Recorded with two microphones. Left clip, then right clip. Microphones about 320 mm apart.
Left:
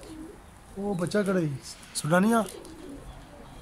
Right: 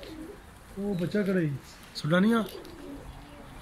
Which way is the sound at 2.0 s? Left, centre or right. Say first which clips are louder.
Left 2 dB; centre.